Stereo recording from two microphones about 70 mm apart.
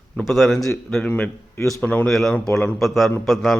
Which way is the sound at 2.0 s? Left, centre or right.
Centre.